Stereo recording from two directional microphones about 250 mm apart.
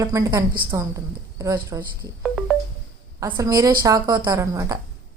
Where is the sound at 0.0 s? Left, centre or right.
Centre.